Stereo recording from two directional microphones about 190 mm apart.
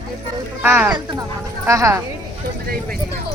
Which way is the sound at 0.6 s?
10° right (ahead or behind).